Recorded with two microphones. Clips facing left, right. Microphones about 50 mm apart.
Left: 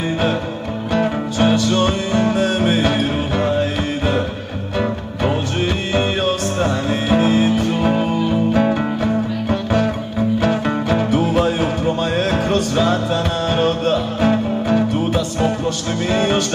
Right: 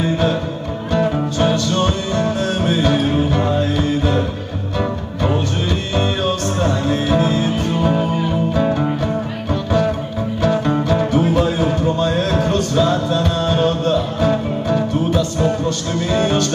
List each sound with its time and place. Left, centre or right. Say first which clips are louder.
0.0 s music: right 1 dB; centre